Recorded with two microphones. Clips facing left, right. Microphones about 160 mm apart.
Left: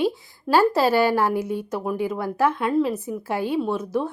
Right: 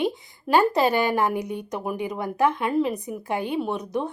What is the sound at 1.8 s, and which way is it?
Speech, 5° right (ahead or behind).